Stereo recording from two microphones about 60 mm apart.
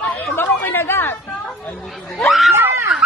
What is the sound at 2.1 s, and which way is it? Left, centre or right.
Speech, centre.